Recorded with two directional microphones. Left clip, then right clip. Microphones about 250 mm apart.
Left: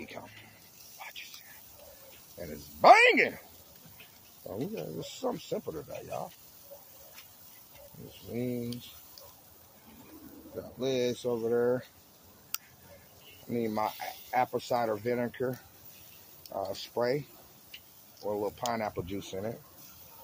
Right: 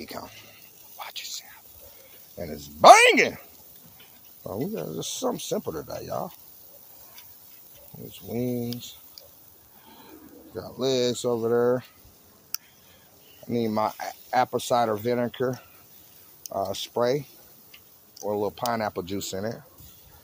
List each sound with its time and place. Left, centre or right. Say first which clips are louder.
0.0 s a sound: right 6 dB; right
0.9 s whispering: right 7 dB; right
2.3 s speech: right 7 dB; right
4.5 s speech: right 6 dB; right
8.3 s speech: right 6 dB; right
10.8 s speech: right 6 dB; right
13.5 s speech: right 6 dB; right
18.3 s speech: right 6 dB; right